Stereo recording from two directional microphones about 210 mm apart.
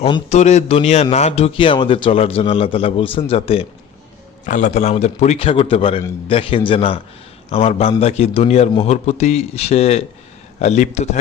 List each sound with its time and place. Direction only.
0.0 s a man's voice: 30° left (ahead or behind)